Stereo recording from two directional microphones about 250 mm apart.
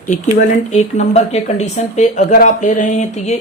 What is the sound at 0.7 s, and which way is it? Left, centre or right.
Speech, left.